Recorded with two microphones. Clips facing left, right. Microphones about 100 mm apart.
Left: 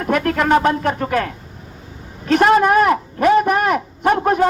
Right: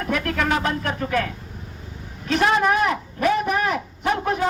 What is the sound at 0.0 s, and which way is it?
A man's voice, 40° left (ahead or behind).